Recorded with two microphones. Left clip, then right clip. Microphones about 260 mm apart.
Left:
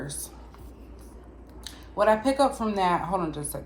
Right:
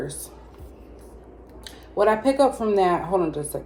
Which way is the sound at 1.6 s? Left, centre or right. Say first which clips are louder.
Right 2 dB; centre.